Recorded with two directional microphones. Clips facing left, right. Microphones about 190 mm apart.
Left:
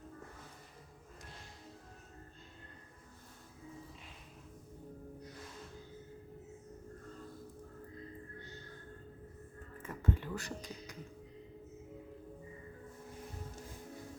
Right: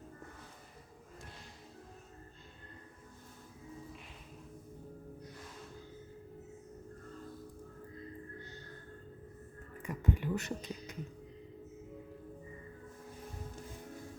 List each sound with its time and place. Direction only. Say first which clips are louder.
9.8 s speech: right 3 dB; 15° right (ahead or behind)